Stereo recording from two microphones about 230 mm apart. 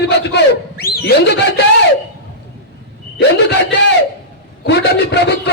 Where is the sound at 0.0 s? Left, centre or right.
Left.